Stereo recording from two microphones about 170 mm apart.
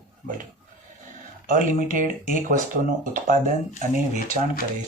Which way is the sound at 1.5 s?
50° right (ahead or behind).